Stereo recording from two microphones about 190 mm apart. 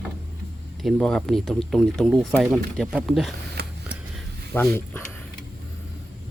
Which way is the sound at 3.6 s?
60° right (ahead or behind).